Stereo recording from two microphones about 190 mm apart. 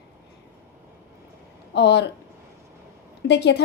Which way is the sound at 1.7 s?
65° left (ahead or behind).